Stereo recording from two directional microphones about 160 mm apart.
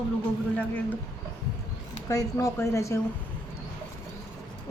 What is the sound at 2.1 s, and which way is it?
Speech, 20° left (ahead or behind).